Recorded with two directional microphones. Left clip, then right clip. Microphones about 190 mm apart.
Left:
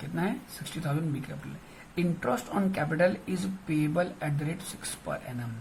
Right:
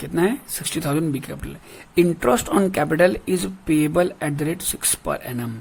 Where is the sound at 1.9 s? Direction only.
50° right (ahead or behind).